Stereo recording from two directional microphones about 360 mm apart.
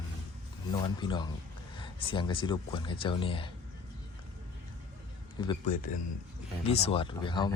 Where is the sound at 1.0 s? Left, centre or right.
Centre.